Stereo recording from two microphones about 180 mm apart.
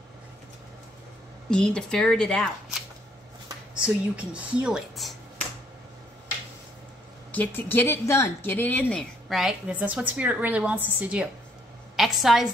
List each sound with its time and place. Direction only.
1.5 s speech: 5° left (ahead or behind)
3.8 s speech: 5° right (ahead or behind)
7.3 s speech: 10° left (ahead or behind); by 11.2 s 10° right (ahead or behind)
12.0 s a sound: centre (ahead or behind)